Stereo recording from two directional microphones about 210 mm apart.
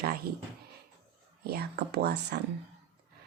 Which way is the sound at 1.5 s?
50° right (ahead or behind).